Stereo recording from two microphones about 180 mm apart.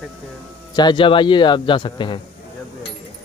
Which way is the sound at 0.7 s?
25° left (ahead or behind).